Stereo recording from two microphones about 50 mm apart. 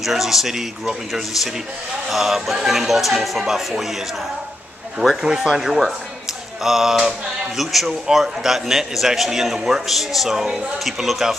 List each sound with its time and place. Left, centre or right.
0.0 s speech: centre
5.2 s speech: centre
5.5 s speech: centre